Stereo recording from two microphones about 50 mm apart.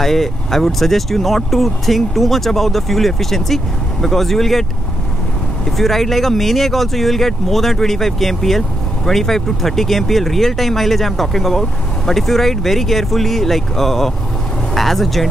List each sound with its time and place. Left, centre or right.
0.0 s speech: centre
5.8 s speech: centre